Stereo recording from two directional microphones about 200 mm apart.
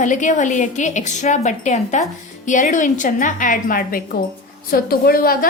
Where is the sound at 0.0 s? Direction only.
40° left (ahead or behind).